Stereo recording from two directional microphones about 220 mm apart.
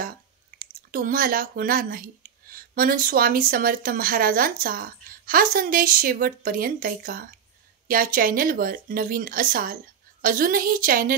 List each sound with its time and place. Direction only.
0.6 s speech: 40° right (ahead or behind)